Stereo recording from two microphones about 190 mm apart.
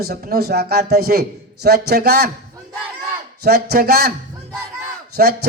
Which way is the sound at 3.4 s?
55° right (ahead or behind).